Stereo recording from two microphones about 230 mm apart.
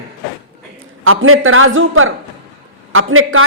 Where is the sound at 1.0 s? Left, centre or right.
Right.